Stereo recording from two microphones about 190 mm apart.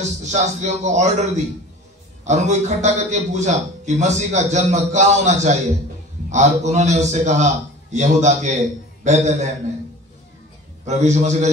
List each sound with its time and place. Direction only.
0.0 s a man's voice: 40° right (ahead or behind)
10.9 s a man's voice: 40° right (ahead or behind)